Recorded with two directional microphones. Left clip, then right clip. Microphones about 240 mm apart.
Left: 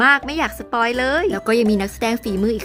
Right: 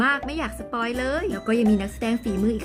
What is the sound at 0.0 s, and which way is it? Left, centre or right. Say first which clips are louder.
Speech: left 8 dB; centre.